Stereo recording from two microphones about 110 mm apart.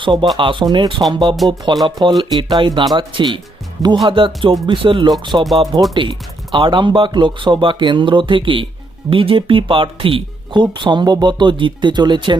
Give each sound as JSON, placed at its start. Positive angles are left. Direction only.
{"t": 0.0, "sound": "speech", "side_deg": -50}
{"t": 5.3, "sound": "speech", "side_deg": -40}